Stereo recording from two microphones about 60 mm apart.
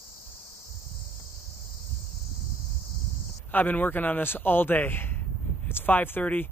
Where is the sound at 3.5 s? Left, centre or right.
Left.